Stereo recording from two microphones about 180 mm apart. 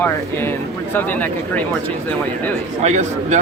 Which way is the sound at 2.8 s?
40° right (ahead or behind).